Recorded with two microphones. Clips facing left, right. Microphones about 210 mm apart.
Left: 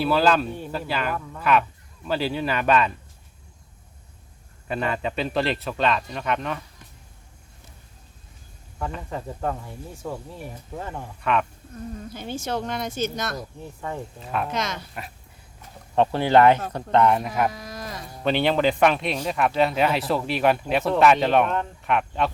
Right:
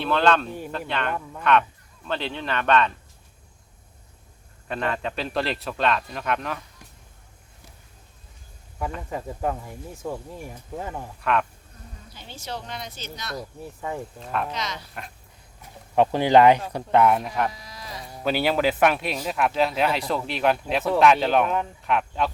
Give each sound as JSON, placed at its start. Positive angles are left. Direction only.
{"t": 0.0, "sound": "speech", "side_deg": 5}
{"t": 4.7, "sound": "speech", "side_deg": 5}
{"t": 8.8, "sound": "speech", "side_deg": -10}
{"t": 11.2, "sound": "speech", "side_deg": 0}
{"t": 12.1, "sound": "a woman's voice", "side_deg": 50}
{"t": 13.8, "sound": "speech", "side_deg": -10}
{"t": 14.2, "sound": "speech", "side_deg": 0}
{"t": 14.5, "sound": "a woman's voice", "side_deg": 50}
{"t": 16.0, "sound": "speech", "side_deg": -15}
{"t": 17.5, "sound": "livestock", "side_deg": 50}
{"t": 18.2, "sound": "speech", "side_deg": -5}